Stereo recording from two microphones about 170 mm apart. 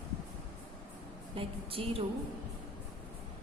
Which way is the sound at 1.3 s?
35° right (ahead or behind).